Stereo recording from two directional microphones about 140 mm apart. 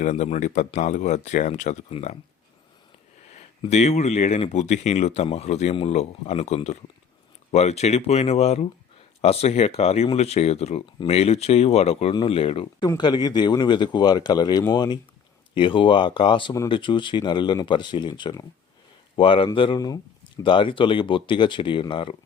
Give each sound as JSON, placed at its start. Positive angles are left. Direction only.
{"t": 0.0, "sound": "speech", "side_deg": 55}
{"t": 1.9, "sound": "speech", "side_deg": 50}
{"t": 3.7, "sound": "speech", "side_deg": 55}
{"t": 12.8, "sound": "speech", "side_deg": 30}